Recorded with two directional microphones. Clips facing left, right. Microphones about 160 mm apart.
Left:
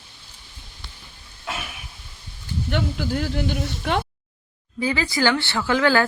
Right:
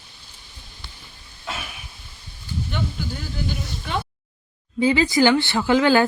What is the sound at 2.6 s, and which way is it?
Speech, 75° left (ahead or behind).